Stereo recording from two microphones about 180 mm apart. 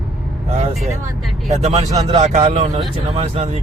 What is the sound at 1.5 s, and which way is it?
Speech, 40° right (ahead or behind).